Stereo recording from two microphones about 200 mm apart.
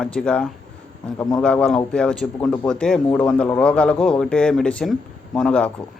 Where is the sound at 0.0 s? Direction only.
5° left (ahead or behind).